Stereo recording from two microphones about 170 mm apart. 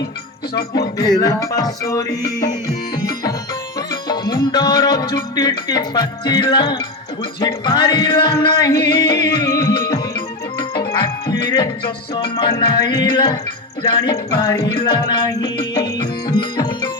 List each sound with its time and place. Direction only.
1.2 s music: 20° left (ahead or behind)
3.8 s music: 25° left (ahead or behind)